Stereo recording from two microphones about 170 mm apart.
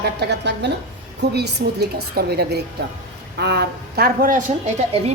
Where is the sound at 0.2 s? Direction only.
85° right.